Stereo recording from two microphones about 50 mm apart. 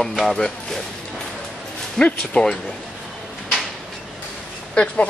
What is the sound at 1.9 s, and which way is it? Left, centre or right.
Speech, left.